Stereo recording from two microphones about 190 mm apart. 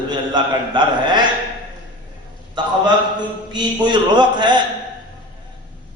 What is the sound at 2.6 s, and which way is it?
A man's voice, 25° right (ahead or behind).